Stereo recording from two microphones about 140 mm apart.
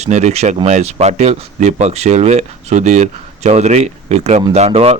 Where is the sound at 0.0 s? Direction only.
55° right (ahead or behind).